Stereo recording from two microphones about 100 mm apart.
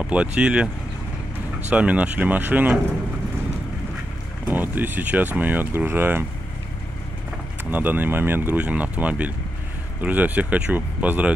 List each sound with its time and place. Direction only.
0.0 s speech: 10° right (ahead or behind)
1.7 s speech: 15° right (ahead or behind)
4.5 s speech: 20° right (ahead or behind)
7.7 s speech: 20° right (ahead or behind)